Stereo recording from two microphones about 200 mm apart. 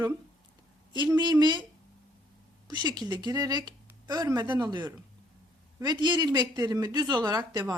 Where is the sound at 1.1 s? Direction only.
20° right (ahead or behind).